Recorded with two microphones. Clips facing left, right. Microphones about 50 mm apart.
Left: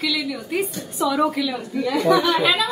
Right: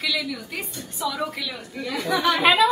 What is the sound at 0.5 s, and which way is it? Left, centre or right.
Speech, centre.